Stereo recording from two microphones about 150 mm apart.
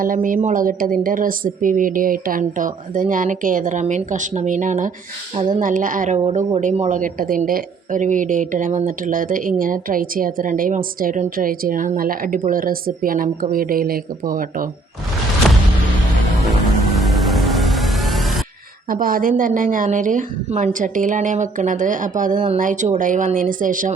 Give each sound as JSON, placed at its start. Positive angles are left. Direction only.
{"t": 0.0, "sound": "a woman's voice", "side_deg": -65}
{"t": 17.0, "sound": "music", "side_deg": 0}
{"t": 18.9, "sound": "a woman's voice", "side_deg": -70}